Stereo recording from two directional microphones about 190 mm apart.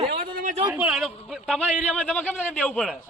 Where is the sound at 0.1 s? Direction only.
50° right (ahead or behind).